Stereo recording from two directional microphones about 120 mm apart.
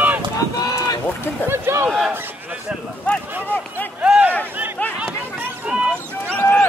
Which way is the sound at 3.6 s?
15° left (ahead or behind).